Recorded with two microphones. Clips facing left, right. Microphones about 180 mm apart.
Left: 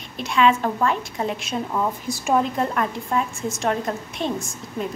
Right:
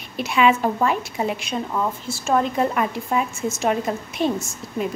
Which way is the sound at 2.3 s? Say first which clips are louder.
Right 1 dB; centre (ahead or behind).